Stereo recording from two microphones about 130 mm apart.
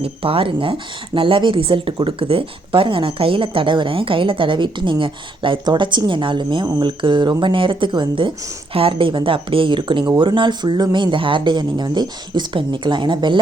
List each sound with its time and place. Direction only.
0.0 s speech: 45° right (ahead or behind)